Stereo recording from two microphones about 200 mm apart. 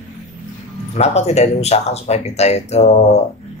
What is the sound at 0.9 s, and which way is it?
Speech, 30° left (ahead or behind).